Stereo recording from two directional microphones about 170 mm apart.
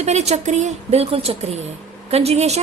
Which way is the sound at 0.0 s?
40° right (ahead or behind).